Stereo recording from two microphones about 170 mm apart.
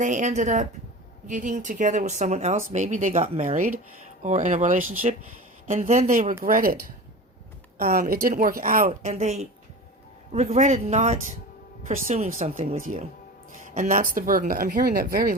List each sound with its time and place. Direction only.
0.0 s a woman's voice: 45° right (ahead or behind)
7.8 s speech: 60° right (ahead or behind); by 12.6 s 40° right (ahead or behind)
12.6 s a woman's voice: 55° right (ahead or behind)